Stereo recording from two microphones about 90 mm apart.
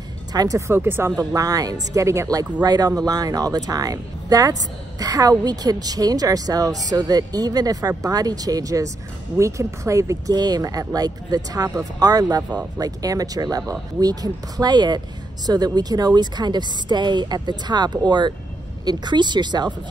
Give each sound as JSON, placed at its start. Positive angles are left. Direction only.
{"t": 0.3, "sound": "speech", "side_deg": -45}
{"t": 0.6, "sound": "speech", "side_deg": -25}
{"t": 1.1, "sound": "speech", "side_deg": -40}
{"t": 10.3, "sound": "speech", "side_deg": -45}